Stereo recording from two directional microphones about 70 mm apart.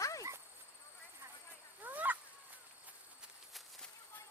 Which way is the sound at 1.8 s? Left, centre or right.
Right.